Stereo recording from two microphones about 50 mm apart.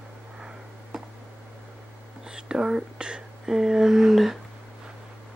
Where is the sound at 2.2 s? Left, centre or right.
Centre.